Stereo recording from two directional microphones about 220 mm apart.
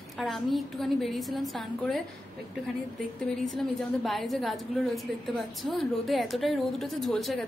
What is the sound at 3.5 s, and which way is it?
A woman's voice, centre (ahead or behind).